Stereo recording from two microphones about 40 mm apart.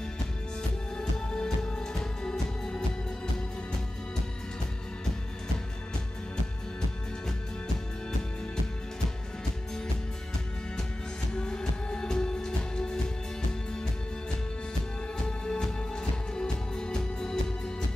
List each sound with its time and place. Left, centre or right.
0.9 s music: centre
11.3 s music: centre
15.2 s music: centre